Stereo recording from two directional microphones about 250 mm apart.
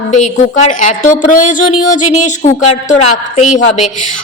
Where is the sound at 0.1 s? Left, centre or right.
Left.